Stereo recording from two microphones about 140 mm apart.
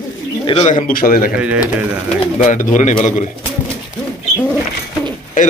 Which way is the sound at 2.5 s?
65° left (ahead or behind).